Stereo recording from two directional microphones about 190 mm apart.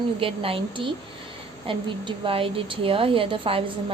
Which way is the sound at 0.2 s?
30° right (ahead or behind).